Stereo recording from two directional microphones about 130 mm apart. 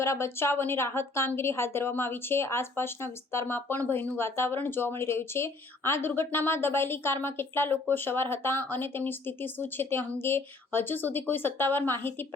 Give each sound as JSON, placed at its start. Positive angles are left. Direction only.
{"t": 0.0, "sound": "a woman's voice", "side_deg": 20}